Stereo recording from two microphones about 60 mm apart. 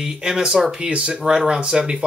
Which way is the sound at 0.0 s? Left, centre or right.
Centre.